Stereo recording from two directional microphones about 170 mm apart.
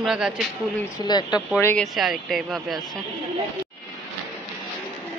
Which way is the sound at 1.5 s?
15° left (ahead or behind).